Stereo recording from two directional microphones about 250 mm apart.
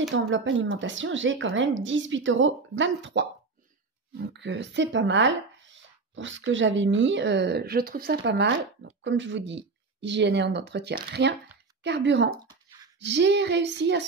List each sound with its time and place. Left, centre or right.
0.1 s speech: right
4.3 s speech: right
12.4 s a sound: centre
13.0 s speech: right